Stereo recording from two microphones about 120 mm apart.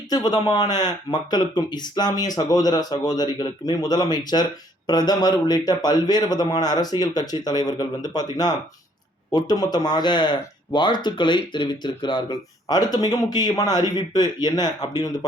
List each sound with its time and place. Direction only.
0.1 s speech: 35° left (ahead or behind)